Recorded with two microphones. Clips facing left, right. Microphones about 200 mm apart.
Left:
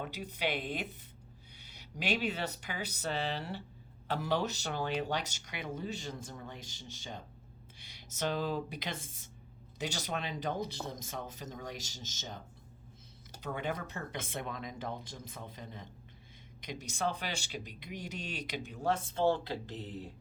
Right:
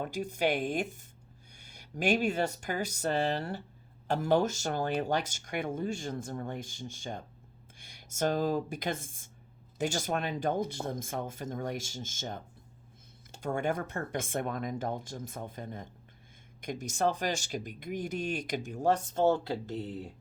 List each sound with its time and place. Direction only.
0.0 s speech: 45° right (ahead or behind)
13.4 s speech: 50° right (ahead or behind)